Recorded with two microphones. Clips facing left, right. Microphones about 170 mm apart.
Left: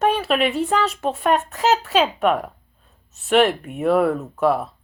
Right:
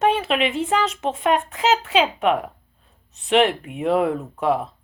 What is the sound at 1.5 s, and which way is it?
Speech, 40° left (ahead or behind).